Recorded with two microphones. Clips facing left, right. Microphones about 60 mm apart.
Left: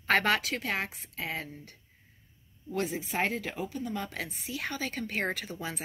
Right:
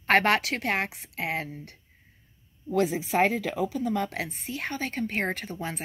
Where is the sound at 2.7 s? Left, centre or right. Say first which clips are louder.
Right 7 dB; right.